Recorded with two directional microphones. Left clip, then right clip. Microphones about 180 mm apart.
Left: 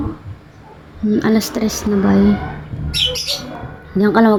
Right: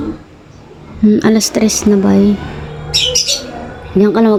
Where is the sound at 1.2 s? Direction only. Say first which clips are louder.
Right 5 dB; 30° right (ahead or behind).